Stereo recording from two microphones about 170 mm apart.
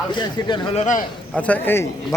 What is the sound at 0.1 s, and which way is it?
Speech, 25° left (ahead or behind).